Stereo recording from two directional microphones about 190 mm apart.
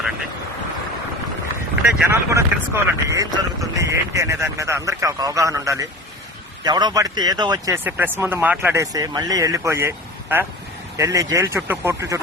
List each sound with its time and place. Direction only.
2.0 s speech: 15° right (ahead or behind)